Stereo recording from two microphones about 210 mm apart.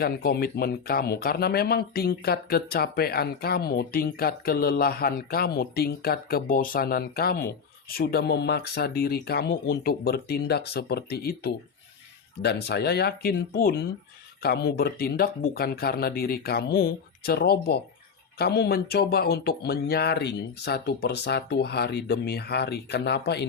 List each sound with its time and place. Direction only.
0.0 s speech: 45° left (ahead or behind)